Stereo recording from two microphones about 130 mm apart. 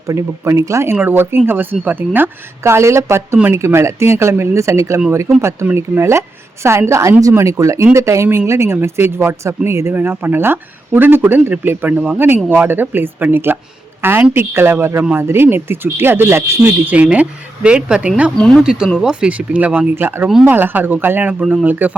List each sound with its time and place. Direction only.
0.1 s a woman's voice: 25° right (ahead or behind); by 18.3 s 10° right (ahead or behind)
18.3 s speech: 5° left (ahead or behind)
18.6 s speech: 5° right (ahead or behind)